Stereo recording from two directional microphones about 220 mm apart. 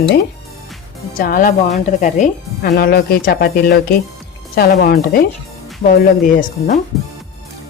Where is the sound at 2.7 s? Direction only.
45° left (ahead or behind).